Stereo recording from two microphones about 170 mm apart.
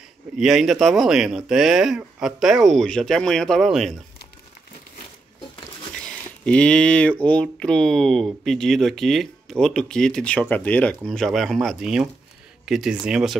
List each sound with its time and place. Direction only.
0.4 s speech: centre (ahead or behind)
5.9 s speech: 5° left (ahead or behind)